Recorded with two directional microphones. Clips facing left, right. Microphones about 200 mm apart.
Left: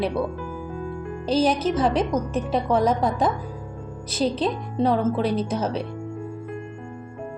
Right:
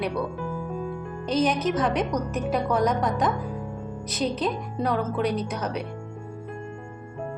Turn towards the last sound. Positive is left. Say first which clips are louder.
# left 4 dB
turn(degrees=30)  # may be behind; listen again after turning